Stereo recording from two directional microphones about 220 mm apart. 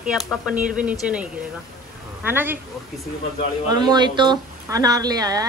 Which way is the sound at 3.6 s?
20° right (ahead or behind).